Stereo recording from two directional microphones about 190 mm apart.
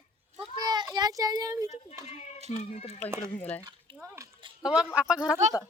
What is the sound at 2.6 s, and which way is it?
Speech, 35° left (ahead or behind).